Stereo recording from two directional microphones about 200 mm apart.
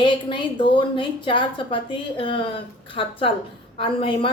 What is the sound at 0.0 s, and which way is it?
A woman's voice, 25° left (ahead or behind).